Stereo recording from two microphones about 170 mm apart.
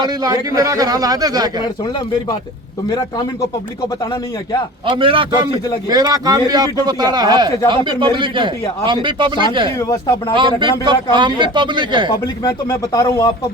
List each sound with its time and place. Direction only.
0.0 s a man's voice: 20° right (ahead or behind)
4.9 s a man's voice: 30° right (ahead or behind)
9.7 s speech: 20° left (ahead or behind)
10.3 s a man's voice: 30° right (ahead or behind)
12.4 s speech: 20° left (ahead or behind)